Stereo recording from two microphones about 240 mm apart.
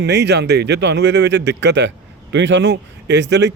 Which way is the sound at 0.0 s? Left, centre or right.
Right.